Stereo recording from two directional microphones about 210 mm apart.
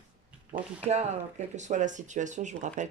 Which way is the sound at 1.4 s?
35° right (ahead or behind).